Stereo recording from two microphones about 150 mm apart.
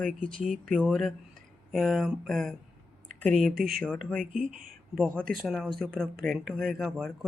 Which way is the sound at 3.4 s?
75° right (ahead or behind).